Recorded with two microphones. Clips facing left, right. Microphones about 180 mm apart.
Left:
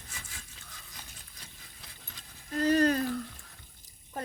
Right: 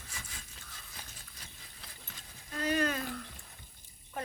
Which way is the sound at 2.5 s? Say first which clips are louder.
Left 7 dB; 40° left (ahead or behind).